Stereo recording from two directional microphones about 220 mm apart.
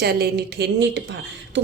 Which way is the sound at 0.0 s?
45° right (ahead or behind).